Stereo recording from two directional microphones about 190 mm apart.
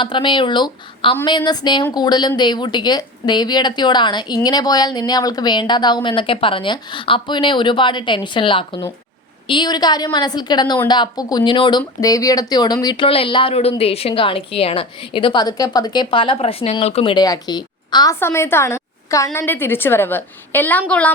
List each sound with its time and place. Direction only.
0.0 s speech: 25° left (ahead or behind); by 21.1 s 5° left (ahead or behind)